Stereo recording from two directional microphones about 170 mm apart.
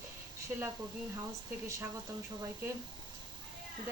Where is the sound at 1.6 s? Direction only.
15° right (ahead or behind).